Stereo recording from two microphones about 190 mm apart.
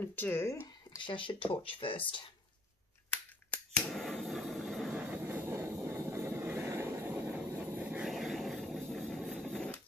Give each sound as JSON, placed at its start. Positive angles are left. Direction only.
{"t": 0.1, "sound": "speech", "side_deg": 10}
{"t": 0.9, "sound": "speech", "side_deg": 25}
{"t": 3.4, "sound": "camera", "side_deg": 5}